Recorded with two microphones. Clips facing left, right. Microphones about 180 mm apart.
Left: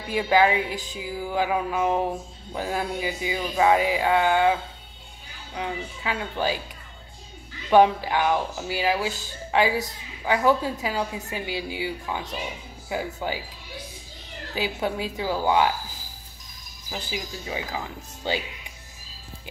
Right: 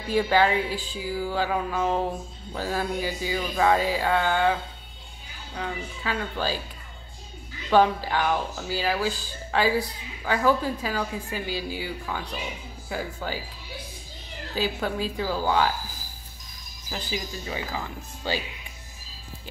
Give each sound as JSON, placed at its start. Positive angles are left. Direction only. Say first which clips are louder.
{"t": 0.1, "sound": "speech", "louder": "left 1 dB", "side_deg": 15}
{"t": 5.6, "sound": "speech", "louder": "left 2 dB", "side_deg": 20}
{"t": 7.7, "sound": "speech", "louder": "left 3 dB", "side_deg": 15}
{"t": 14.5, "sound": "speech", "louder": "even", "side_deg": 20}
{"t": 16.9, "sound": "speech", "louder": "right 1 dB", "side_deg": 10}